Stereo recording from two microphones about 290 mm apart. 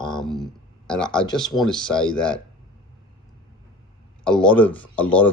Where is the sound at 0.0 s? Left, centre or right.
Centre.